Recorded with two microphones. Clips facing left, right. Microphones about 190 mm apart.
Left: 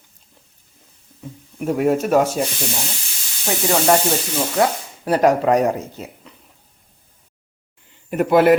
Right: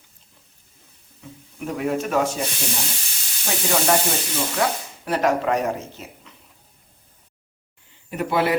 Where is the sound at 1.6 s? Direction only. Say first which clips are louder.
Left 6 dB; 45° left (ahead or behind).